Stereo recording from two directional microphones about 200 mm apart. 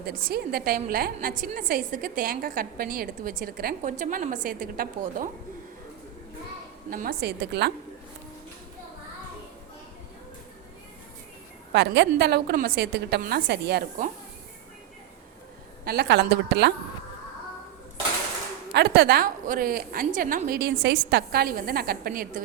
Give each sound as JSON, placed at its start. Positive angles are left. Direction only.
{"t": 0.0, "sound": "a woman's voice", "side_deg": -50}
{"t": 6.9, "sound": "a woman's voice", "side_deg": -45}
{"t": 11.7, "sound": "a woman's voice", "side_deg": -60}
{"t": 15.8, "sound": "a woman's voice", "side_deg": -50}
{"t": 18.7, "sound": "a woman's voice", "side_deg": -55}